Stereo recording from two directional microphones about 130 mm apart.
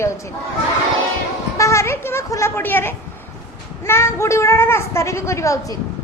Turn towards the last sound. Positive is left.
turn(degrees=25)  # may be behind; listen again after turning